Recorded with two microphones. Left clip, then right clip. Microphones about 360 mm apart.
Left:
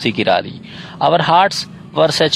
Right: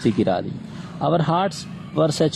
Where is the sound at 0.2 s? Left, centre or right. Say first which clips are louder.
Left 7 dB; left.